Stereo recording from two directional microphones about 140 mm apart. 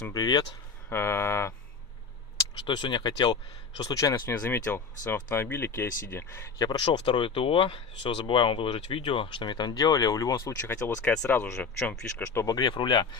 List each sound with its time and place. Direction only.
0.1 s speech: 30° left (ahead or behind)
0.9 s speech: 15° left (ahead or behind)
2.6 s speech: 35° left (ahead or behind)
4.4 s speech: 15° left (ahead or behind); by 13.1 s 35° left (ahead or behind)